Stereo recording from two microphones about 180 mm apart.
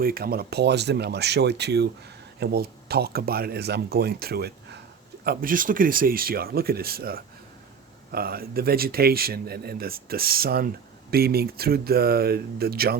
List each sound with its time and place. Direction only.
0.0 s speech: 55° right (ahead or behind)